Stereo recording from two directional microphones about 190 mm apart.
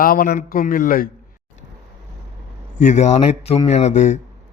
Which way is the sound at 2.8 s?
40° left (ahead or behind).